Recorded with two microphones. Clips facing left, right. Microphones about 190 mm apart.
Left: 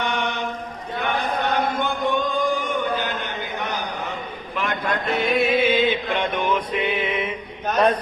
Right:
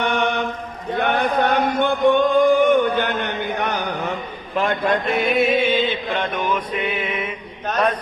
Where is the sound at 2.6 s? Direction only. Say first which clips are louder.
Right 8 dB; 65° right (ahead or behind).